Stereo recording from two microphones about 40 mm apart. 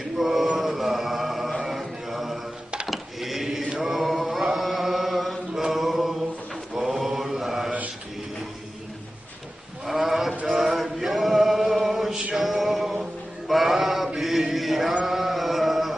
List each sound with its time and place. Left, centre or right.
0.2 s mantra: centre
0.6 s music: centre
1.6 s mantra: centre
2.9 s a sound: centre
3.7 s chant: centre
5.6 s a sound: centre
6.8 s mantra: centre
9.8 s a sound: centre
10.4 s male singing: centre
12.4 s music: centre
13.5 s a sound: centre
14.2 s chant: centre
15.0 s music: centre